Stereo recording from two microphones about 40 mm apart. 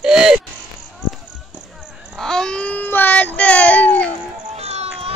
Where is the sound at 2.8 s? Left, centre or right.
Left.